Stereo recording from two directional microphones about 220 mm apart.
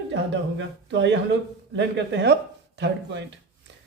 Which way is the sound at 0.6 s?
55° right (ahead or behind).